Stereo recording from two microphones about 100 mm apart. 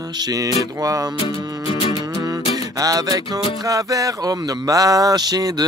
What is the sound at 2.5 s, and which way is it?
Music, 40° right (ahead or behind).